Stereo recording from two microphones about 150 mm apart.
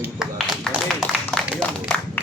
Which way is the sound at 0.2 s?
Centre (ahead or behind).